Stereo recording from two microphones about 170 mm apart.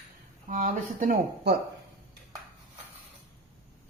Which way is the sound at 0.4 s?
50° right (ahead or behind).